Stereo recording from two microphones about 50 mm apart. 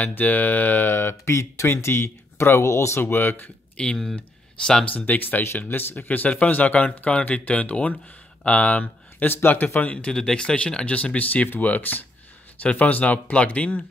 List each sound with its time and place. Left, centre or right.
0.0 s speech: left
0.9 s speech: left
3.0 s speech: left
3.7 s speech: centre
4.9 s speech: left
9.8 s speech: left